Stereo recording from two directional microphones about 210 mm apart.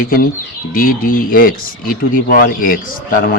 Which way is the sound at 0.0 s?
45° left (ahead or behind).